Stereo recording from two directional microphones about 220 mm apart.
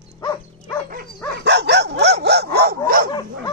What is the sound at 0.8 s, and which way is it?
Dog, 45° right (ahead or behind).